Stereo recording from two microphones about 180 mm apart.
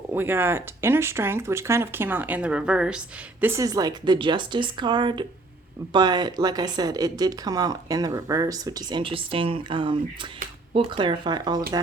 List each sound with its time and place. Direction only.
0.1 s speech: 10° right (ahead or behind)
3.4 s speech: 15° right (ahead or behind)